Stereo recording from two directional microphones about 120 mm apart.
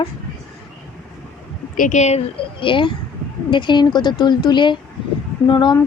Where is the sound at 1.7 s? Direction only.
90° left; by 2.3 s 70° left (ahead or behind).